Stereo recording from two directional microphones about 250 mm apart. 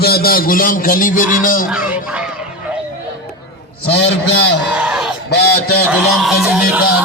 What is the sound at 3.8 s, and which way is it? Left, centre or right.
Speech, left.